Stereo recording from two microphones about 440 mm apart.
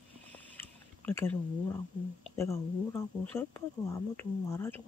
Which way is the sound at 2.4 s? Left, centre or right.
Centre.